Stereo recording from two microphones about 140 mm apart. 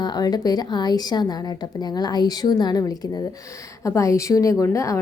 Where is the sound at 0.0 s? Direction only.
30° left (ahead or behind).